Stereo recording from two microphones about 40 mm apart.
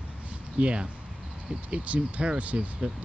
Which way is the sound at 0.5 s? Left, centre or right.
Right.